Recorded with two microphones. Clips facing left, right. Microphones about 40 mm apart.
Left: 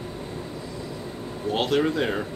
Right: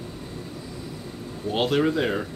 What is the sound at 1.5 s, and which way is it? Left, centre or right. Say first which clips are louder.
Speech: right 1 dB; centre.